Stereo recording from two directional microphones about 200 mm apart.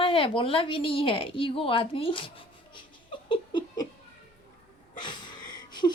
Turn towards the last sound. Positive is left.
turn(degrees=20)  # may be behind; listen again after turning